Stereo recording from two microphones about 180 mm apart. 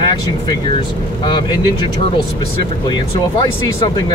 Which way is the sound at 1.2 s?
25° left (ahead or behind).